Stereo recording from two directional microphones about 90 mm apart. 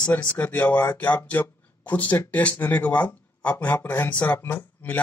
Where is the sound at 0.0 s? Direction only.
15° left (ahead or behind).